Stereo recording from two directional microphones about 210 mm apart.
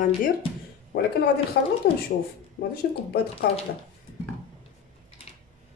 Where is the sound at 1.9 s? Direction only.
50° left (ahead or behind).